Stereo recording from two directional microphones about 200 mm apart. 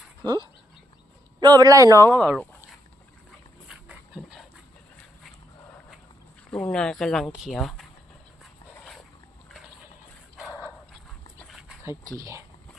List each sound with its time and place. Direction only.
1.4 s speech: 20° right (ahead or behind)
2.0 s speech: 5° left (ahead or behind)
3.7 s dog: 5° right (ahead or behind)
6.5 s speech: 5° left (ahead or behind)
10.3 s dog: centre (ahead or behind)
11.9 s speech: 15° right (ahead or behind)